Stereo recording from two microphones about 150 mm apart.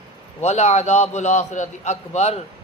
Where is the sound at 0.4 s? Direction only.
45° left (ahead or behind).